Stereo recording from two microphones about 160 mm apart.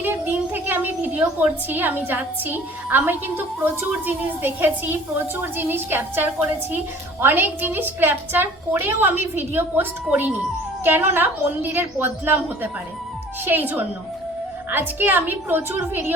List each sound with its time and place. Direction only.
0.0 s a woman's voice: 10° right (ahead or behind)